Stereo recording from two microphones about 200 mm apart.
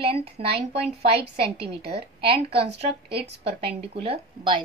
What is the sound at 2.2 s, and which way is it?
A woman's voice, 30° right (ahead or behind).